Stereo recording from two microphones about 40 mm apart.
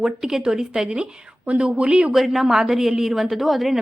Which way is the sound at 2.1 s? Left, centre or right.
Centre.